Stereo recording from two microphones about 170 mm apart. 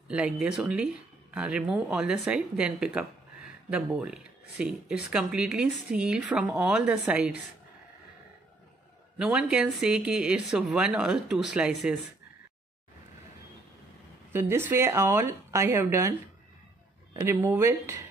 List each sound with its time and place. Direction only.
0.1 s speech: 5° right (ahead or behind)
9.2 s speech: 5° right (ahead or behind)
14.3 s speech: 15° right (ahead or behind)